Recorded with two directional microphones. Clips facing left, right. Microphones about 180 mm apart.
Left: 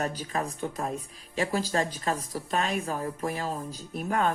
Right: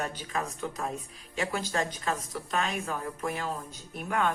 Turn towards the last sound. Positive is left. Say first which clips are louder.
# left 2 dB
turn(degrees=35)  # may be behind; listen again after turning